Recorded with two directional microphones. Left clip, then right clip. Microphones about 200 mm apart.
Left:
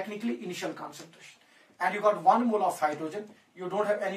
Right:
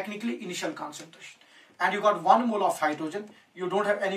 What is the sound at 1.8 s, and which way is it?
Speech, 10° right (ahead or behind).